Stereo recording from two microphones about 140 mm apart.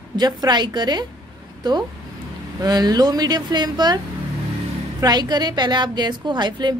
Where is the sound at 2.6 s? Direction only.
30° right (ahead or behind).